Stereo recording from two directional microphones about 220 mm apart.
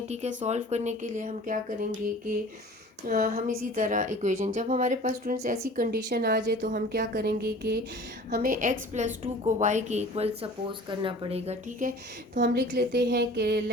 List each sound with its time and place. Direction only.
0.1 s a woman's voice: 30° right (ahead or behind)
3.2 s a woman's voice: 35° right (ahead or behind)
6.7 s a woman's voice: 40° right (ahead or behind)
12.4 s a woman's voice: 50° right (ahead or behind)